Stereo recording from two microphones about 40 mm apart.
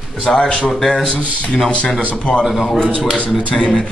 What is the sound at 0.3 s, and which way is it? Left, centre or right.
Speech, left.